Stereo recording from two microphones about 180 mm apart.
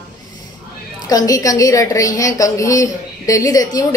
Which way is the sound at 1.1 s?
20° left (ahead or behind).